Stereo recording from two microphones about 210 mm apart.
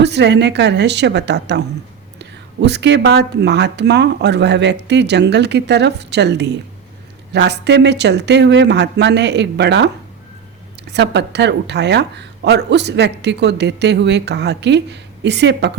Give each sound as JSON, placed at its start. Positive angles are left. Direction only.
{"t": 0.0, "sound": "speech", "side_deg": -55}
{"t": 10.9, "sound": "speech", "side_deg": -55}